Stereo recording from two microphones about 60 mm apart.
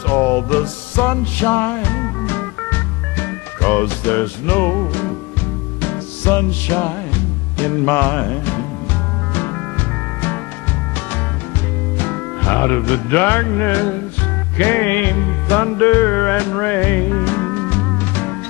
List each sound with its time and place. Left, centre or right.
0.0 s music: left
12.0 s music: left